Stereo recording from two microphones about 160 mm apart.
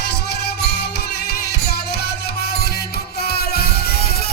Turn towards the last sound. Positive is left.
turn(degrees=80)